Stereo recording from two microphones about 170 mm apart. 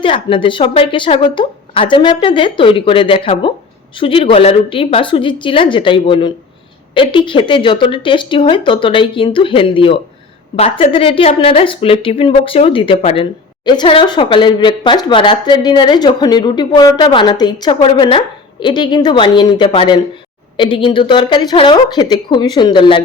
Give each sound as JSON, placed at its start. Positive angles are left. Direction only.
{"t": 0.0, "sound": "speech", "side_deg": 30}